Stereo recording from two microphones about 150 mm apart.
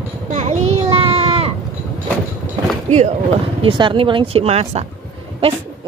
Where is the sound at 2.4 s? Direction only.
50° right (ahead or behind).